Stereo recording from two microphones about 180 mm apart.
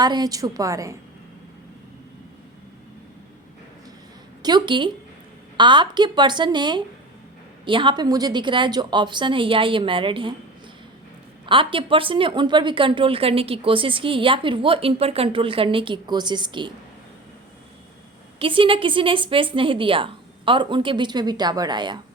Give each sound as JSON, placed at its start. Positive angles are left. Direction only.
{"t": 0.0, "sound": "a woman's voice", "side_deg": -20}
{"t": 4.4, "sound": "a woman's voice", "side_deg": -25}
{"t": 11.4, "sound": "a woman's voice", "side_deg": -30}
{"t": 18.3, "sound": "a woman's voice", "side_deg": -30}